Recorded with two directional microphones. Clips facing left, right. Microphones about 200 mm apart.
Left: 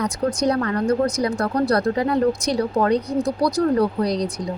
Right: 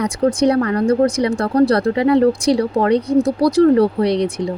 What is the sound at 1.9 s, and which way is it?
Speech, 85° right.